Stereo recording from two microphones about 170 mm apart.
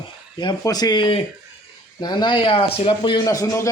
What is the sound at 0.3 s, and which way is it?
Speech, 25° left (ahead or behind).